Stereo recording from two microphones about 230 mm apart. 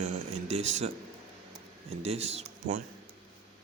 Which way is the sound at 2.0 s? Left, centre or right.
Right.